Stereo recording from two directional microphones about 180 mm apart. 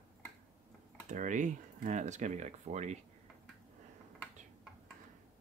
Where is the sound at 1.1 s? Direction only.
45° right (ahead or behind).